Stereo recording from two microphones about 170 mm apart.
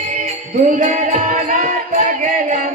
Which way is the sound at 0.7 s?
50° right (ahead or behind).